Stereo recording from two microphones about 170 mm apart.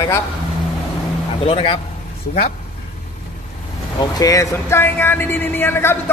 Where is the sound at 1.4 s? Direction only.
35° left (ahead or behind).